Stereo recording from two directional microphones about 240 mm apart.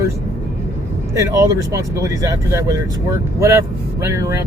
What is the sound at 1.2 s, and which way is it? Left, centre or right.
Speech, centre.